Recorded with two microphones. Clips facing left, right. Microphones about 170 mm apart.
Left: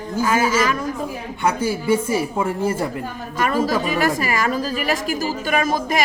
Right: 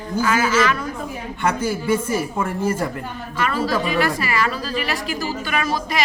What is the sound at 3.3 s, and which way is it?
A woman's voice, 45° left (ahead or behind).